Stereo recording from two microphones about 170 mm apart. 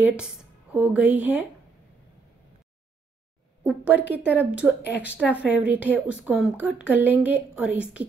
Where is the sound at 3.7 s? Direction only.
10° right (ahead or behind).